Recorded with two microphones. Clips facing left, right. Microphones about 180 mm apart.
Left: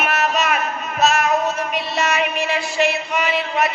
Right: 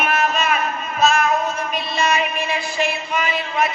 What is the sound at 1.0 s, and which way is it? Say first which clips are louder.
Music: even; 70° left (ahead or behind).